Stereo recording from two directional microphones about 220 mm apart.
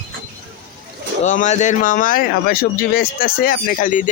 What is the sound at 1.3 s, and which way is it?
Speech, 35° left (ahead or behind).